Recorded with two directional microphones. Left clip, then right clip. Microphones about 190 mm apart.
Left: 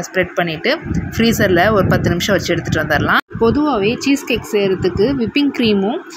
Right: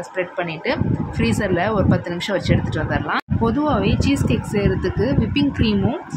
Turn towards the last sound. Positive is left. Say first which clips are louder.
# left 5 dB
turn(degrees=10)  # may be behind; listen again after turning